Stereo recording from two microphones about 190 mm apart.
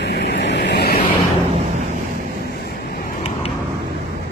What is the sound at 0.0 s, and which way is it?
Vehicle, 65° left (ahead or behind).